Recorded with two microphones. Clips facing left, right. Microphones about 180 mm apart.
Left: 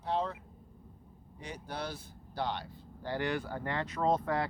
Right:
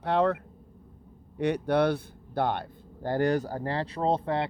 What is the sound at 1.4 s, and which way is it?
Speech, 65° right (ahead or behind).